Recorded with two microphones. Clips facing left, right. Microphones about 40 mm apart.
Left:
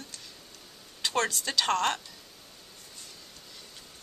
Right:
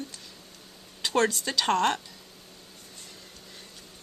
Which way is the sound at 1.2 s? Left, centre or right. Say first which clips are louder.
Right 4 dB; centre.